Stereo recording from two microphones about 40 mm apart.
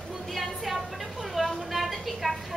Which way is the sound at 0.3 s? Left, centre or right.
Centre.